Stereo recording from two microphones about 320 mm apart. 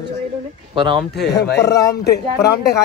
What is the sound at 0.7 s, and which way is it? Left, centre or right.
Speech, centre.